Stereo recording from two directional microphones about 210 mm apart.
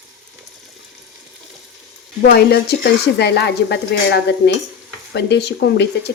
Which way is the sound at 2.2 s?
50° left (ahead or behind).